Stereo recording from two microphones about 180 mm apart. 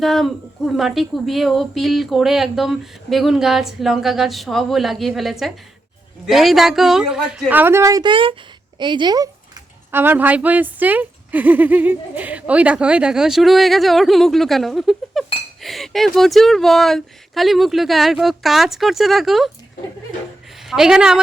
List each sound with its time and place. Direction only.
0.0 s a woman's voice: centre (ahead or behind); by 9.3 s 20° right (ahead or behind)
9.9 s a woman's voice: 10° right (ahead or behind)
20.7 s a woman's voice: 5° right (ahead or behind)